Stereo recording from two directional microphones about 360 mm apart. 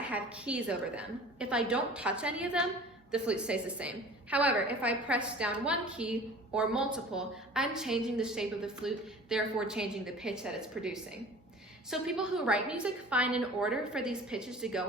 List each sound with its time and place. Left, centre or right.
0.0 s a woman's voice: centre